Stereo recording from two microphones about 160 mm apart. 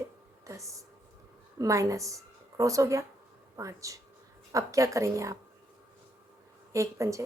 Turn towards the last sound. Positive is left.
turn(degrees=-20)  # may be behind; listen again after turning